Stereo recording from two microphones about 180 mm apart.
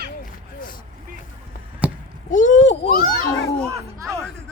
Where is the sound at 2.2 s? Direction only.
45° left (ahead or behind).